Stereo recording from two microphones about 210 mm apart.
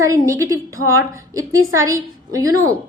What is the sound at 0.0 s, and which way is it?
A woman's voice, 15° right (ahead or behind).